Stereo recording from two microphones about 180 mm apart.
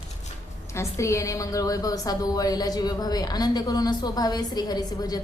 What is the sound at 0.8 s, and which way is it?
A woman's voice, 15° left (ahead or behind).